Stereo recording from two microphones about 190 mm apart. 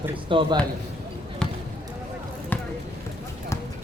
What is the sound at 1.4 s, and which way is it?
Basketball bounce, 5° left (ahead or behind).